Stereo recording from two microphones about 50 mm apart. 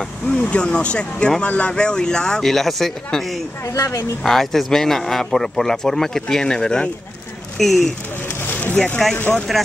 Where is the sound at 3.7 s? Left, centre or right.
Left.